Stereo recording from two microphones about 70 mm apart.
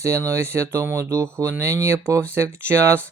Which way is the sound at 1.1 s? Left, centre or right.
Right.